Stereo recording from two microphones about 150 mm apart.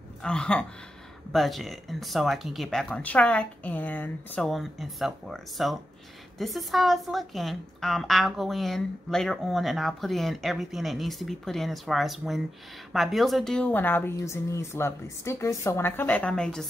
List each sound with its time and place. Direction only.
0.2 s speech: 5° left (ahead or behind)
4.5 s speech: centre (ahead or behind)